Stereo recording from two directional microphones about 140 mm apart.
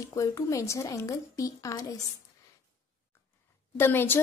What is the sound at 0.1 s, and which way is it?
A woman's voice, 25° left (ahead or behind).